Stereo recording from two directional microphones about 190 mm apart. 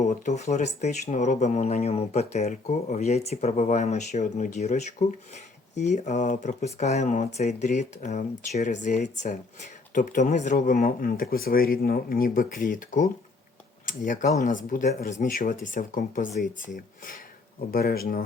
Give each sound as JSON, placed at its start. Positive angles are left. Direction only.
{"t": 0.0, "sound": "speech", "side_deg": 40}
{"t": 17.7, "sound": "speech", "side_deg": 55}